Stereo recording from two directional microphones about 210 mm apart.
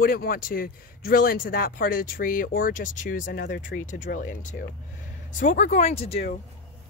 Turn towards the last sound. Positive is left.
turn(degrees=30)  # may be behind; listen again after turning